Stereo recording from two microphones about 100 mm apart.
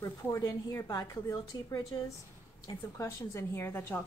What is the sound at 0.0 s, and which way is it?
Speech, 35° left (ahead or behind).